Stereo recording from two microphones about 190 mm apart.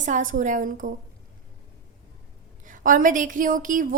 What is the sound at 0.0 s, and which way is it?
Speech, 45° right (ahead or behind).